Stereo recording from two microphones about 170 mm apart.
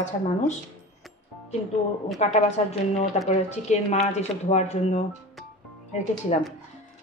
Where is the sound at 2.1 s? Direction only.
40° left (ahead or behind).